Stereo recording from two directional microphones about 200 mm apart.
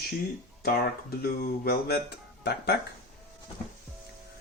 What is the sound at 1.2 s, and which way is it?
Speech, 50° left (ahead or behind).